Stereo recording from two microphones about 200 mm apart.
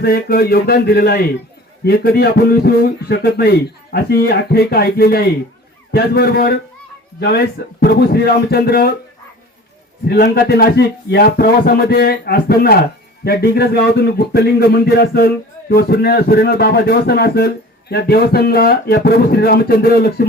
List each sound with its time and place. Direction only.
0.0 s speech: 50° left (ahead or behind)
10.1 s speech: 50° left (ahead or behind)